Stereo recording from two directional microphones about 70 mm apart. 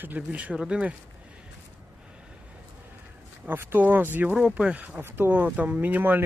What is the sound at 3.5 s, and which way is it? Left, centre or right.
Speech, right.